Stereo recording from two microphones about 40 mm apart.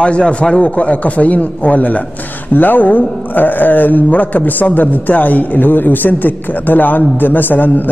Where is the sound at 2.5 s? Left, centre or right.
Left.